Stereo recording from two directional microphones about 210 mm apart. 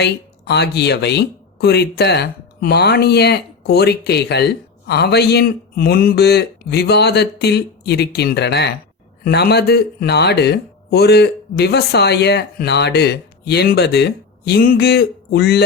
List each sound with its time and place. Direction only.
0.0 s speech: 50° left (ahead or behind)